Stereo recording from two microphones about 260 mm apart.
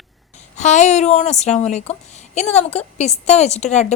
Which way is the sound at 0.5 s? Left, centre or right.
Left.